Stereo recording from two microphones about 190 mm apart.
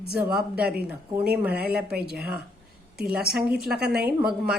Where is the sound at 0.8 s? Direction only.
5° right (ahead or behind).